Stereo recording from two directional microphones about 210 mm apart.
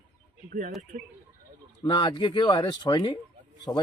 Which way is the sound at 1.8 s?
20° left (ahead or behind).